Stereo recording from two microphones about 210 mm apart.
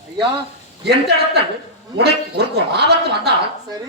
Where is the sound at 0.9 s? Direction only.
50° right (ahead or behind).